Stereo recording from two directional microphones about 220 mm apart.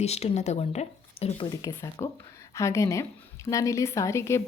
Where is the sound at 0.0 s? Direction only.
30° left (ahead or behind).